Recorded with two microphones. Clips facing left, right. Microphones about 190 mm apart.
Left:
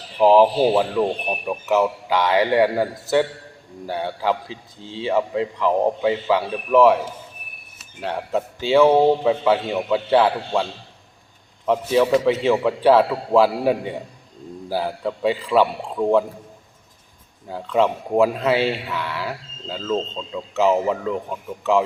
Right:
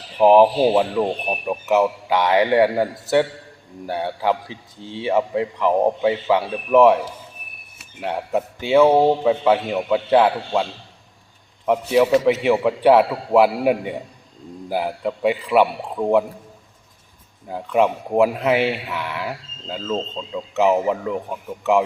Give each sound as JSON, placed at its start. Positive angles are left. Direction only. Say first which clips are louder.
{"t": 0.2, "sound": "a man's voice", "louder": "right 1 dB", "side_deg": -15}
{"t": 8.0, "sound": "a man's voice", "louder": "right 1 dB", "side_deg": -15}
{"t": 11.6, "sound": "a man's voice", "louder": "right 1 dB", "side_deg": -15}
{"t": 17.5, "sound": "a man's voice", "louder": "right 1 dB", "side_deg": -15}